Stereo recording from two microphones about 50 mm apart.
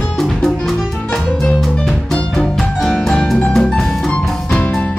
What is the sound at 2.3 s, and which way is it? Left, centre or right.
Music, centre.